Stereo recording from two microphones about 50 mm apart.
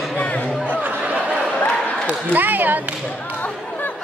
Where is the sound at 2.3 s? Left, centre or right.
Right.